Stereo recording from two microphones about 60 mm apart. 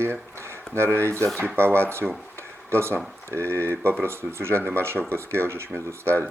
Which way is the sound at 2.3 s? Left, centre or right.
Right.